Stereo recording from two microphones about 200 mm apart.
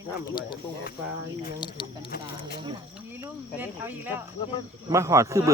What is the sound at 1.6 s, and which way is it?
Speech, 25° left (ahead or behind).